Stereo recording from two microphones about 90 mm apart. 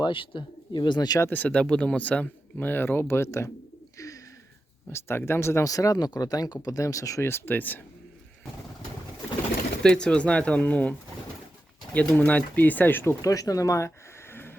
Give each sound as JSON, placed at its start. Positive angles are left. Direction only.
{"t": 0.0, "sound": "speech", "side_deg": 65}
{"t": 1.3, "sound": "speech", "side_deg": 15}
{"t": 3.9, "sound": "bird", "side_deg": 40}
{"t": 4.9, "sound": "speech", "side_deg": 30}
{"t": 7.3, "sound": "speech", "side_deg": 25}
{"t": 9.8, "sound": "speech", "side_deg": 10}
{"t": 11.9, "sound": "speech", "side_deg": 15}
{"t": 13.2, "sound": "speech", "side_deg": 40}